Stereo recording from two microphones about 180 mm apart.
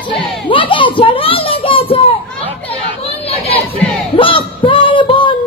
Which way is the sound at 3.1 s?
35° left (ahead or behind).